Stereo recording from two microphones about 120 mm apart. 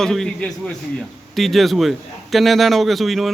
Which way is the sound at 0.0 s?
5° left (ahead or behind).